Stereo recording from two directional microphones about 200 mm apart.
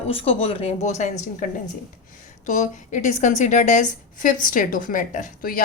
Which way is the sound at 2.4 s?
40° left (ahead or behind).